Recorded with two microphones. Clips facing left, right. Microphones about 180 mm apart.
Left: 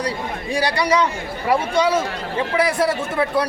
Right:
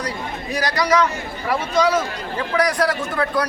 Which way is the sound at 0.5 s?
30° left (ahead or behind).